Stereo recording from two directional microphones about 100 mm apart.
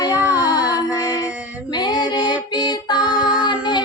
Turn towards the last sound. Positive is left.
turn(degrees=55)  # may be behind; listen again after turning